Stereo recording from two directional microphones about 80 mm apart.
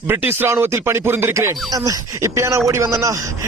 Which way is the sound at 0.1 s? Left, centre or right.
Right.